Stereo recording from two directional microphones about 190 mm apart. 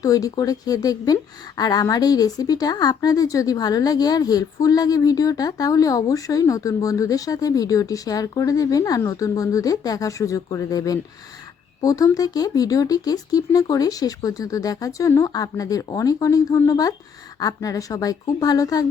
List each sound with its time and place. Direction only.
0.0 s speech: 20° left (ahead or behind)